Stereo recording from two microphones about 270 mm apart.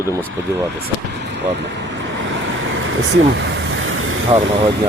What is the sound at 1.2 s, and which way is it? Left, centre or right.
Vehicle, right.